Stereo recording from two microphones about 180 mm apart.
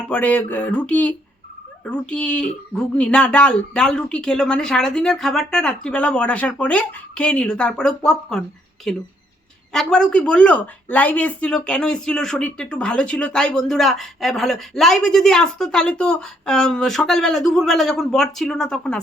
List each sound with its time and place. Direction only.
0.1 s speech: 10° left (ahead or behind)